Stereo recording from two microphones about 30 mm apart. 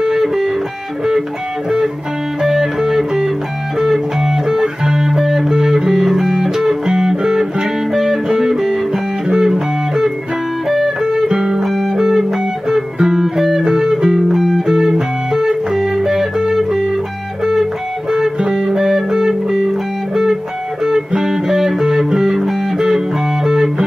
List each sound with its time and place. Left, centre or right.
0.0 s music: centre
2.4 s music: centre
5.5 s music: centre
11.0 s music: right
11.6 s music: centre
14.1 s music: centre
14.7 s music: centre
18.5 s music: centre
19.0 s music: right
19.5 s music: centre